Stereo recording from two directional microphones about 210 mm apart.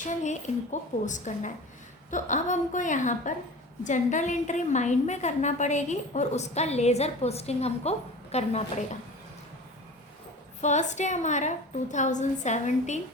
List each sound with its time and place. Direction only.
0.0 s a woman's voice: 35° left (ahead or behind)
10.6 s a woman's voice: 35° left (ahead or behind)